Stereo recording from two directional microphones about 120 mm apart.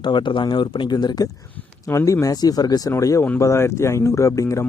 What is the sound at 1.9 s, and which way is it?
Speech, 25° left (ahead or behind).